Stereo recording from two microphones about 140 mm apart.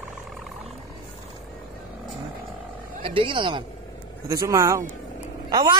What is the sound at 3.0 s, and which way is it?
Speech, 40° right (ahead or behind).